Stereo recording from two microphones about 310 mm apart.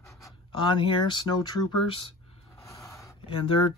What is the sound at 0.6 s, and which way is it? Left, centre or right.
Speech, centre.